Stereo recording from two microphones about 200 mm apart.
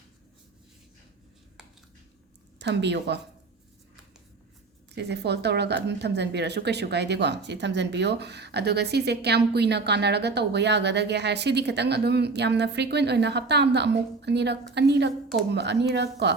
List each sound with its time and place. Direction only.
2.6 s speech: 60° right (ahead or behind)
4.9 s speech: 55° right (ahead or behind)